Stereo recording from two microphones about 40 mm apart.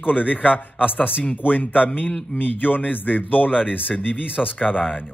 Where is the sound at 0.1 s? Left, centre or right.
Right.